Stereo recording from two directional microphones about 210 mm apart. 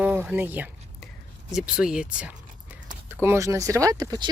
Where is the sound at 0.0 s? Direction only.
5° right (ahead or behind).